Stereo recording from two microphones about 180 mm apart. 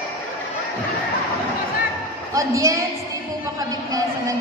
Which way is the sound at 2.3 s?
15° right (ahead or behind).